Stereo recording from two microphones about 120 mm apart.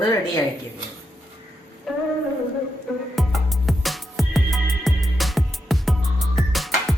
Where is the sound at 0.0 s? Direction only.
25° left (ahead or behind).